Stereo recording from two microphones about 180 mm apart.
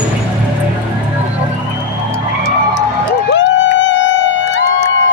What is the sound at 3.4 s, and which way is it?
Music, 90° left.